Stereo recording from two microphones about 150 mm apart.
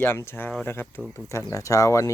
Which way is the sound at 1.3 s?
20° left (ahead or behind).